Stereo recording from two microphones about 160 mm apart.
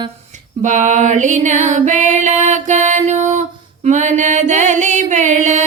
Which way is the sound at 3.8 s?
50° right (ahead or behind).